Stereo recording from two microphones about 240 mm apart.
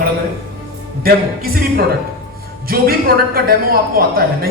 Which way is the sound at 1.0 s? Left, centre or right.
Right.